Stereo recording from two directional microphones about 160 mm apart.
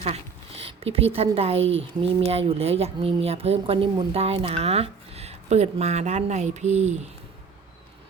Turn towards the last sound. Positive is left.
turn(degrees=-45)  # may be behind; listen again after turning